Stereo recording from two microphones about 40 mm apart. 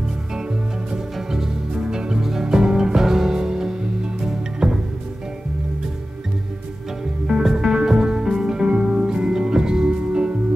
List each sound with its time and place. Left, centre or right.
0.9 s music: centre
7.2 s music: centre